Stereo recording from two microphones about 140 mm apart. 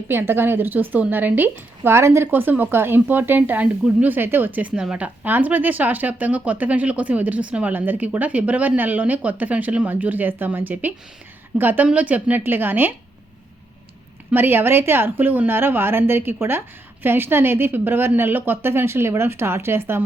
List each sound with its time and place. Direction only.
0.1 s a woman's voice: 15° right (ahead or behind)
14.3 s a woman's voice: 15° right (ahead or behind)